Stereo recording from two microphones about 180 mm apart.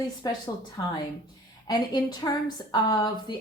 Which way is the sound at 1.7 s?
20° left (ahead or behind).